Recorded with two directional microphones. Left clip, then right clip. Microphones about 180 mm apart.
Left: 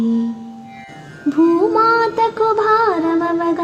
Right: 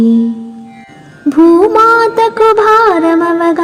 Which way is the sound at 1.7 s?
30° right (ahead or behind).